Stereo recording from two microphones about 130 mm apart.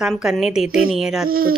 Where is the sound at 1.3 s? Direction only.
90° right.